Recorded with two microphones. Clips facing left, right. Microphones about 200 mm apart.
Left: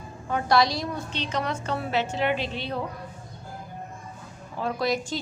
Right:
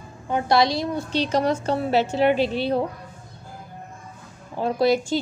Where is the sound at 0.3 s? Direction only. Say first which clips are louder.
Right 3 dB; 25° right (ahead or behind).